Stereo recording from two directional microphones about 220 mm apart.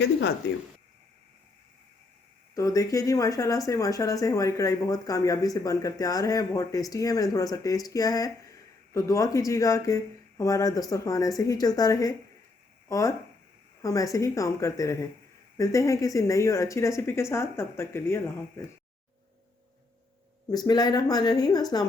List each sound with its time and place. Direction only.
0.0 s speech: 55° left (ahead or behind)
2.6 s speech: 15° left (ahead or behind)
20.5 s speech: 15° left (ahead or behind)